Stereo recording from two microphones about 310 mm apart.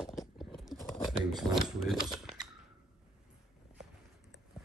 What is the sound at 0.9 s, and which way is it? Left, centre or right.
Speech, centre.